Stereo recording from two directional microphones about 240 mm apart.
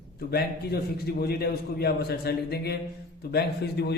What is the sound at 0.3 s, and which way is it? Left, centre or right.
A man's voice, left.